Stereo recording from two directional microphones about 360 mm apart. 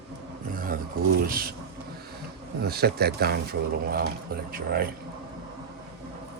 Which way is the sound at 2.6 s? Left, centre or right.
Right.